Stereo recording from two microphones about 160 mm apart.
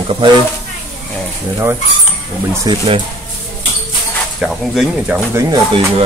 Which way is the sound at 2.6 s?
35° right (ahead or behind).